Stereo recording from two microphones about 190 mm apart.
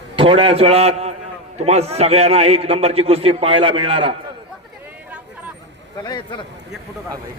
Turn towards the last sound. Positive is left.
turn(degrees=25)  # may be behind; listen again after turning